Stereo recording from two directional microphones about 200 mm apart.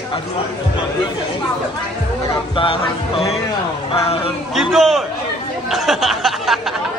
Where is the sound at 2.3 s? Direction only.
25° left (ahead or behind).